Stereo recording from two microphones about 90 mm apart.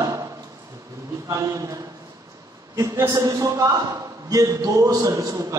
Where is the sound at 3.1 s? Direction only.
45° right (ahead or behind).